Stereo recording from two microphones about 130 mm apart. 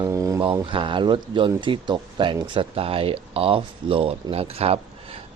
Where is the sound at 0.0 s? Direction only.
25° right (ahead or behind).